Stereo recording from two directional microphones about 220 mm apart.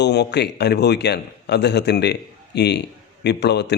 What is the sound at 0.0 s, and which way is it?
Speech, 50° left (ahead or behind).